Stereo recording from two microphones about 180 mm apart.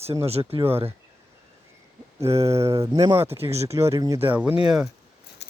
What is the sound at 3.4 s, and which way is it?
Speech, 35° right (ahead or behind).